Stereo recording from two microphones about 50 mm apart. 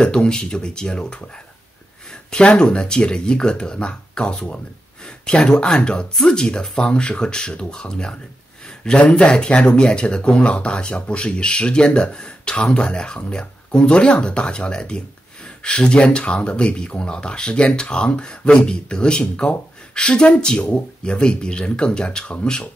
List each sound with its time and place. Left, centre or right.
0.0 s speech: centre
8.6 s a sound: centre
9.1 s speech: centre